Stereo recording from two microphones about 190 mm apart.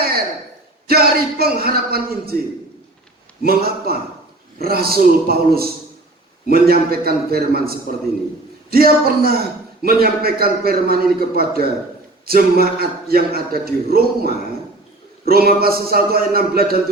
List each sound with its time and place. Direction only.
0.9 s a man's voice: 55° right (ahead or behind)
3.4 s a man's voice: 55° right (ahead or behind)